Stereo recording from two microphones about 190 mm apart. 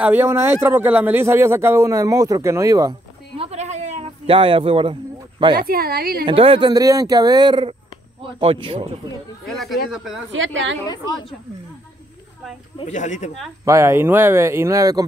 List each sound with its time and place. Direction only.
0.0 s a man's voice: 10° right (ahead or behind); by 4.9 s 30° right (ahead or behind)
5.6 s a woman's voice: 50° right (ahead or behind)
6.2 s speech: 30° right (ahead or behind)
9.5 s a woman's voice: centre (ahead or behind)
10.3 s a woman's voice: 85° right
12.7 s speech: 40° left (ahead or behind)
13.7 s speech: 15° right (ahead or behind)